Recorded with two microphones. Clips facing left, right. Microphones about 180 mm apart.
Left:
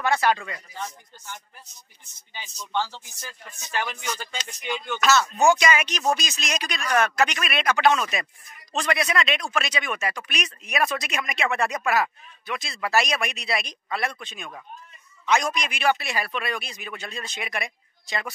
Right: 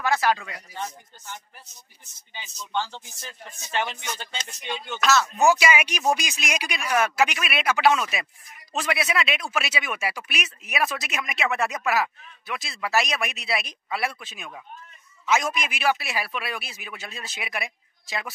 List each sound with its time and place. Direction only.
0.0 s speech: centre (ahead or behind)
2.9 s speech: 25° right (ahead or behind)
5.0 s speech: centre (ahead or behind)